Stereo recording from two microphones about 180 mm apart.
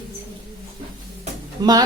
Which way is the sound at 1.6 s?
20° right (ahead or behind).